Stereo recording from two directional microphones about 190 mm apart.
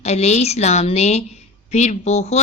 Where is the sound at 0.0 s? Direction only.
35° left (ahead or behind).